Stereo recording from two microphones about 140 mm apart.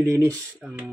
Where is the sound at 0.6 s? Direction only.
5° right (ahead or behind).